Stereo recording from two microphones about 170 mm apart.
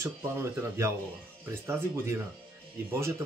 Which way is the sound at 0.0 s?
15° right (ahead or behind).